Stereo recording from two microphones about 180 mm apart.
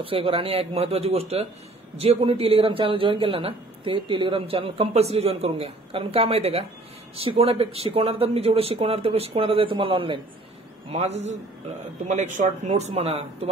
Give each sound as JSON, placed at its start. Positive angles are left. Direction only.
{"t": 0.0, "sound": "a man's voice", "side_deg": -30}